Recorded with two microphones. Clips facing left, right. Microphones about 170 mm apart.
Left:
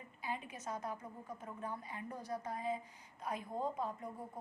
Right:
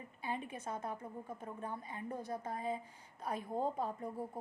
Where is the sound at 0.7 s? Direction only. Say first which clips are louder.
Even; 25° right (ahead or behind).